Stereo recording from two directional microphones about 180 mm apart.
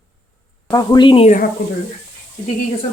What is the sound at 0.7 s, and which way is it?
Speech, 20° left (ahead or behind).